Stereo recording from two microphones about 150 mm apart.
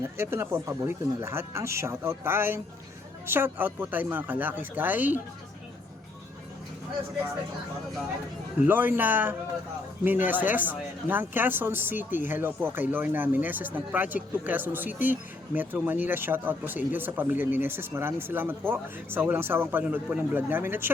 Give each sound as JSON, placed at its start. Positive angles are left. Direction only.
{"t": 0.2, "sound": "speech", "side_deg": -15}
{"t": 8.6, "sound": "speech", "side_deg": -10}